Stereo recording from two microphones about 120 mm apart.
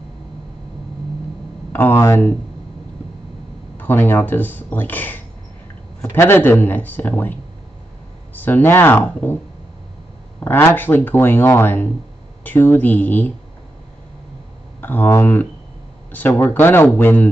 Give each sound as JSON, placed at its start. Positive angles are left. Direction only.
{"t": 1.7, "sound": "speech", "side_deg": 15}
{"t": 3.7, "sound": "speech", "side_deg": 15}
{"t": 8.4, "sound": "speech", "side_deg": 15}
{"t": 10.4, "sound": "speech", "side_deg": 15}
{"t": 14.8, "sound": "speech", "side_deg": 15}